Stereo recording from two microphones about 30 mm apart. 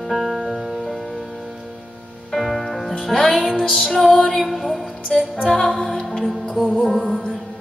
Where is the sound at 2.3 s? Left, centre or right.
Centre.